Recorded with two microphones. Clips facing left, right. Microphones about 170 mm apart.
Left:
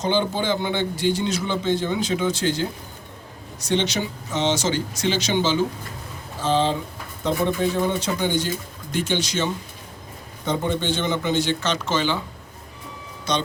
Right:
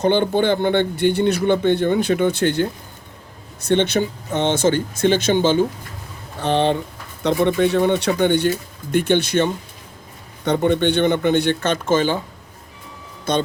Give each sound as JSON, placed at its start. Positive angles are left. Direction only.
{"t": 0.0, "sound": "a man's voice", "side_deg": -55}
{"t": 6.4, "sound": "a sound", "side_deg": -65}
{"t": 7.2, "sound": "a man's voice", "side_deg": -70}
{"t": 13.3, "sound": "speech", "side_deg": -50}